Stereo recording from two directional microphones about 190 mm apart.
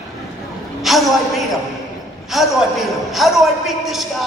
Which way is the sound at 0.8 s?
Centre (ahead or behind).